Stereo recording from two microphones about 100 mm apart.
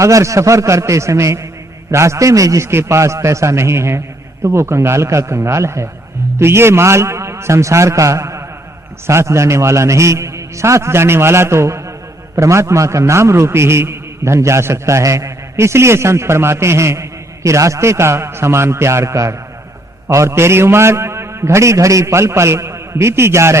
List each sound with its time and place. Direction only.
0.0 s a man's voice: 30° right (ahead or behind)